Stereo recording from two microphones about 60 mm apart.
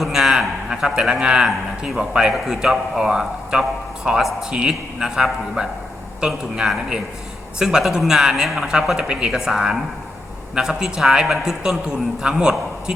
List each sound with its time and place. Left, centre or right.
0.1 s a man's voice: centre
4.2 s a man's voice: centre
4.5 s a man's voice: centre